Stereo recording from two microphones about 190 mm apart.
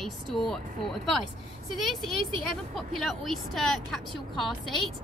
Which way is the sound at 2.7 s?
Centre (ahead or behind).